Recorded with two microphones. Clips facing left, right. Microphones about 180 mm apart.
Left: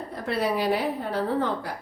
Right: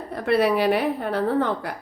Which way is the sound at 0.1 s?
65° right (ahead or behind).